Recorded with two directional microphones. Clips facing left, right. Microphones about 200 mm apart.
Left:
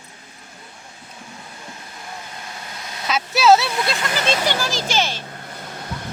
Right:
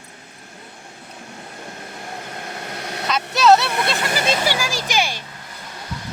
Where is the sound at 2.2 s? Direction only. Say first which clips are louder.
Right 5 dB; 55° right (ahead or behind).